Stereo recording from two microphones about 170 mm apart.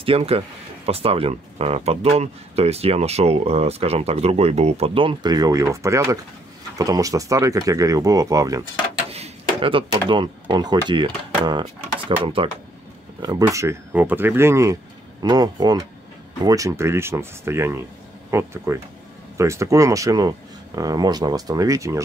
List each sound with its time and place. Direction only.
0.0 s speech: 35° right (ahead or behind); by 8.6 s 20° right (ahead or behind)
9.1 s a sound: 35° right (ahead or behind)
10.5 s speech: 25° right (ahead or behind)
13.2 s speech: 20° right (ahead or behind)